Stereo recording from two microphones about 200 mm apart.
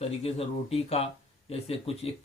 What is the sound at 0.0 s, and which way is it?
Speech, 30° left (ahead or behind).